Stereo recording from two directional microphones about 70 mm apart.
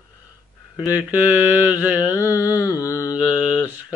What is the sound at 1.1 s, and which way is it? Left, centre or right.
Mantra, right.